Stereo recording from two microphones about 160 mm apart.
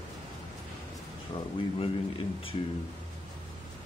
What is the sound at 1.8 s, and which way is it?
Speech, 35° left (ahead or behind).